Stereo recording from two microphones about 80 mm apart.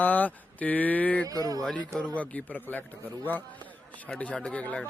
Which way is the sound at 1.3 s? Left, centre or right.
Right.